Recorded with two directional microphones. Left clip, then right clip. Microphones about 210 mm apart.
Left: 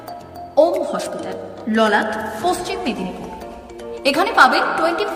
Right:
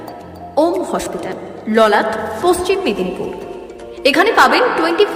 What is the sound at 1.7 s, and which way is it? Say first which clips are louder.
A woman's voice: right 5 dB; 20° right (ahead or behind).